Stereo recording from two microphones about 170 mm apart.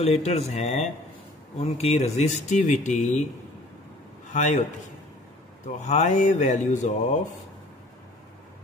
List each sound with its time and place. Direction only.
0.0 s speech: 40° left (ahead or behind)
4.3 s a man's voice: 45° left (ahead or behind)
5.9 s speech: 45° left (ahead or behind)